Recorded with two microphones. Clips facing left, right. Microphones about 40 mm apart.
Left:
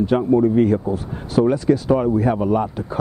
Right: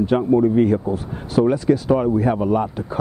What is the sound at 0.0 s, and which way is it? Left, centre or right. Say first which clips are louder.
Speech: even; centre.